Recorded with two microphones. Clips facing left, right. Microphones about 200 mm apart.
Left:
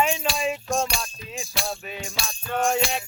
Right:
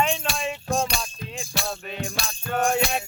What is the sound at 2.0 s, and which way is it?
Music, 55° right (ahead or behind).